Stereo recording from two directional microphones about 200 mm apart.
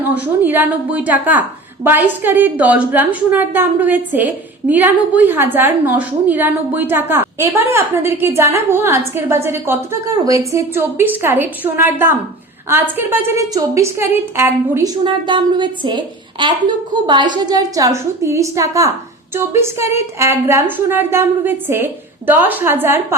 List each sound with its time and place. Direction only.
0.1 s a woman's voice: 10° right (ahead or behind)